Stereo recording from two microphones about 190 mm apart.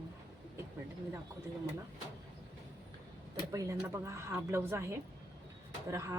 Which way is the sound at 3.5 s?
15° right (ahead or behind).